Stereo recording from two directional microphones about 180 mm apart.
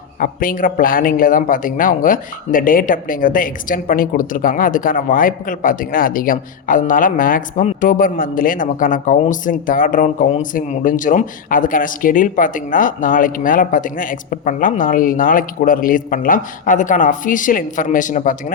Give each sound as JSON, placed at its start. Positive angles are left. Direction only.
{"t": 0.2, "sound": "speech", "side_deg": 50}